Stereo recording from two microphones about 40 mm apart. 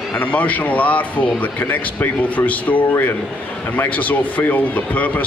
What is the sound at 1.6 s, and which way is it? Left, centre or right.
Speech, left.